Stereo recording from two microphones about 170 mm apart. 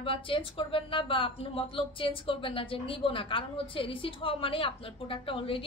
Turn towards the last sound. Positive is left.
turn(degrees=30)  # may be behind; listen again after turning